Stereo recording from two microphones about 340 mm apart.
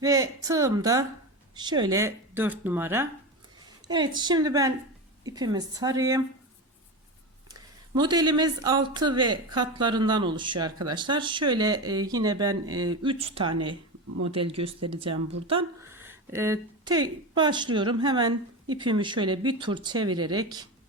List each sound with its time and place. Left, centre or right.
0.0 s speech: centre
7.9 s speech: centre